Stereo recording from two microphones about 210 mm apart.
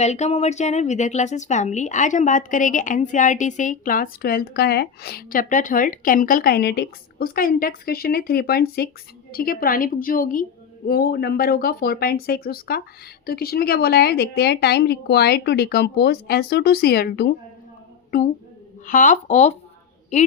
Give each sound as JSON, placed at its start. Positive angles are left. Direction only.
{"t": 0.0, "sound": "a woman's voice", "side_deg": 30}